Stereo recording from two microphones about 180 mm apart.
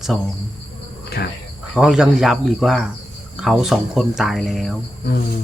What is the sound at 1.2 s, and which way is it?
Speech, 65° left (ahead or behind).